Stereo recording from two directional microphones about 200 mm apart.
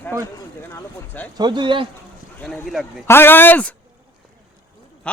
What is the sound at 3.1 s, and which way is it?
Speech, 10° left (ahead or behind).